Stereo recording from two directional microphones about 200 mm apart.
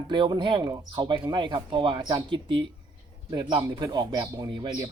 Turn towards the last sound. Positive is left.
turn(degrees=-20)  # may be behind; listen again after turning